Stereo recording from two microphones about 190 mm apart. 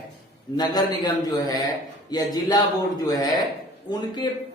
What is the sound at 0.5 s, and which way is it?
Speech, 20° left (ahead or behind).